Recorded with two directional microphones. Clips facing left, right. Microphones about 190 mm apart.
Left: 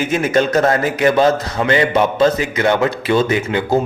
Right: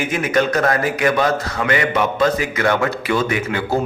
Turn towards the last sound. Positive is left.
turn(degrees=25)  # may be behind; listen again after turning